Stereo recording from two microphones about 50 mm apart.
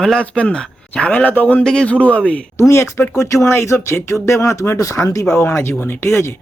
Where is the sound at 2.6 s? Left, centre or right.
Left.